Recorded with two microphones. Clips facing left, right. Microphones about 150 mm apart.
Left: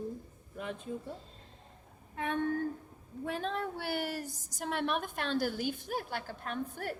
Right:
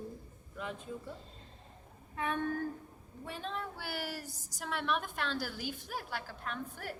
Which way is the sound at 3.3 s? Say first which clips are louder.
Left 4 dB; 45° left (ahead or behind).